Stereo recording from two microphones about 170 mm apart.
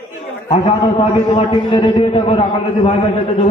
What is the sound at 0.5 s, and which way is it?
A man's voice, 35° left (ahead or behind).